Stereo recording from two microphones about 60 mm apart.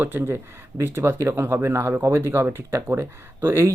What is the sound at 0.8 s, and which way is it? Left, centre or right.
Speech, right.